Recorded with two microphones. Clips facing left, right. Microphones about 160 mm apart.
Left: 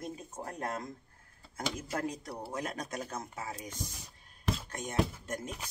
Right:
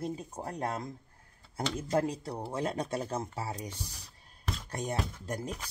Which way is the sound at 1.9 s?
30° right (ahead or behind).